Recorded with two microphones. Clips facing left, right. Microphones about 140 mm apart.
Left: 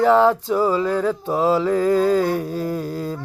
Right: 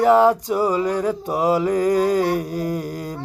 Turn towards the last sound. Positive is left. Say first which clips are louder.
# left 1 dB
turn(degrees=-15)  # may be behind; listen again after turning